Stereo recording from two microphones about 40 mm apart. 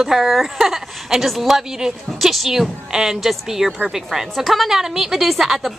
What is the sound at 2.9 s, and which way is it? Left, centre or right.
A woman's voice, centre.